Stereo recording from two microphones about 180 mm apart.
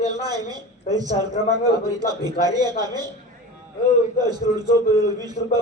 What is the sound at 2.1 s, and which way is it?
Speech, 20° right (ahead or behind).